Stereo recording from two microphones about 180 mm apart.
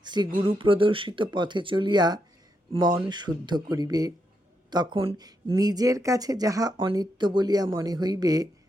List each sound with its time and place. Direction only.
0.0 s speech: 25° right (ahead or behind)